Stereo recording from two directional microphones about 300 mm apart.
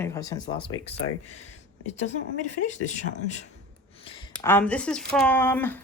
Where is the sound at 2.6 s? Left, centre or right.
Left.